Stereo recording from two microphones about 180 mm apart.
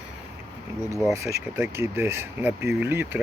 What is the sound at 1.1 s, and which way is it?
Speech, 15° right (ahead or behind).